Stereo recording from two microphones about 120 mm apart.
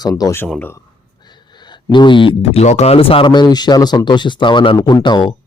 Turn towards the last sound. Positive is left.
turn(degrees=40)  # may be behind; listen again after turning